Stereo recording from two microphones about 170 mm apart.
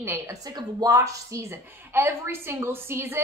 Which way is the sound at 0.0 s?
15° right (ahead or behind).